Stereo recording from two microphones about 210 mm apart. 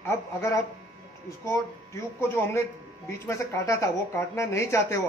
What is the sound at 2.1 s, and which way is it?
A man's voice, 10° left (ahead or behind).